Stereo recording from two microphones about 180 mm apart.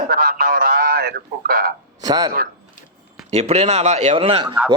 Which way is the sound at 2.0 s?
20° right (ahead or behind).